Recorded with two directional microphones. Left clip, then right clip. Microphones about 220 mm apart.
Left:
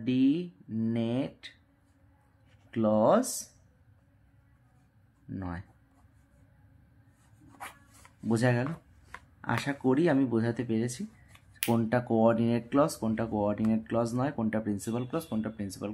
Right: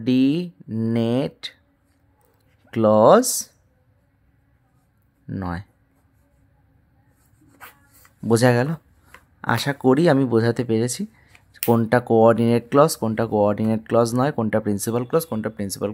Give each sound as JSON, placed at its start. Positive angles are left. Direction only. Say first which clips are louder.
{"t": 0.0, "sound": "speech", "louder": "right 8 dB", "side_deg": -50}
{"t": 2.7, "sound": "speech", "louder": "right 11 dB", "side_deg": -50}
{"t": 5.3, "sound": "speech", "louder": "right 10 dB", "side_deg": -45}
{"t": 8.3, "sound": "speech", "louder": "right 11 dB", "side_deg": -50}